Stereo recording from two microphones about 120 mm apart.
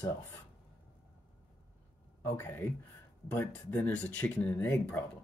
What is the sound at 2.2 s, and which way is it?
Speech, 20° left (ahead or behind).